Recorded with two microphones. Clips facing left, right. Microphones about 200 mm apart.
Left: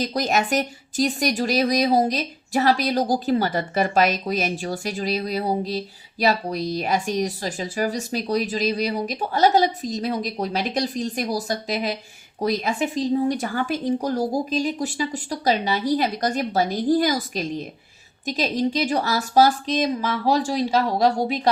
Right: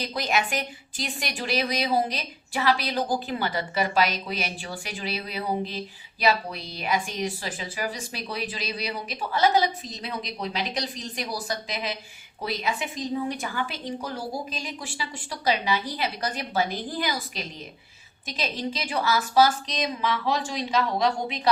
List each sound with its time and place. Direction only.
0.0 s a woman's voice: 40° left (ahead or behind)